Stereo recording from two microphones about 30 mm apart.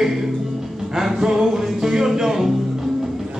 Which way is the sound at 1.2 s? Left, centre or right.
Right.